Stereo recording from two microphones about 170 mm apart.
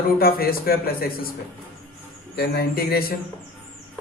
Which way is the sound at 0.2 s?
60° left (ahead or behind).